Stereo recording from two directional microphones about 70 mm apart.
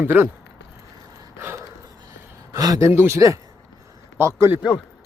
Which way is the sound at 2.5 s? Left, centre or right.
Right.